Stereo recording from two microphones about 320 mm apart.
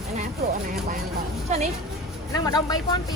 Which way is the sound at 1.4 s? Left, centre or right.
Right.